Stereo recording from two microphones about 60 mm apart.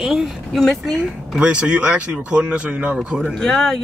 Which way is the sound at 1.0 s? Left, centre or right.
Centre.